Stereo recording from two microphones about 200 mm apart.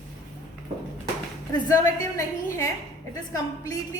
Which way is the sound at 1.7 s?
15° left (ahead or behind).